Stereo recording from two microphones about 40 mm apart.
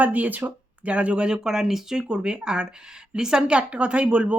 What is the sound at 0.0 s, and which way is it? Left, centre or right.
Speech, right.